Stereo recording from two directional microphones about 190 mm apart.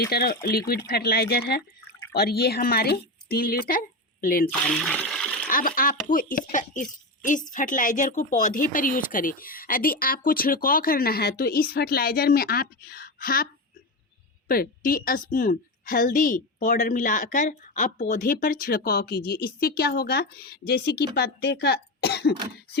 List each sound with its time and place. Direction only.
0.1 s speech: 55° left (ahead or behind)
4.7 s toilet flush: 5° left (ahead or behind)
5.5 s a woman's voice: 45° left (ahead or behind)